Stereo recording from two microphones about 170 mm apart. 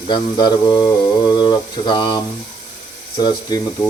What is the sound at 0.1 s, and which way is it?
Speech, 25° left (ahead or behind).